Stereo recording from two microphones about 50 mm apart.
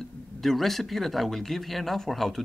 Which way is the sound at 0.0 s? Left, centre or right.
Centre.